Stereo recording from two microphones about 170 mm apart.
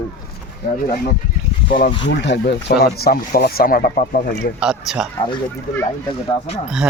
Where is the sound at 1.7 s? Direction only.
55° left (ahead or behind).